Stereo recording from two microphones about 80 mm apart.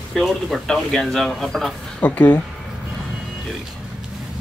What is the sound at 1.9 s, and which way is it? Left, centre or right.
Speech, centre.